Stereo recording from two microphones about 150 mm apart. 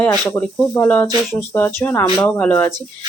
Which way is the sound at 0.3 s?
15° left (ahead or behind).